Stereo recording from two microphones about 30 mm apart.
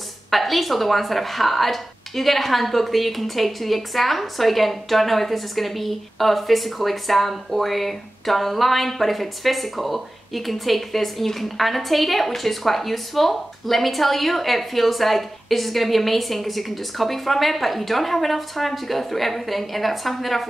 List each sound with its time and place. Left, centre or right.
0.3 s a woman's voice: centre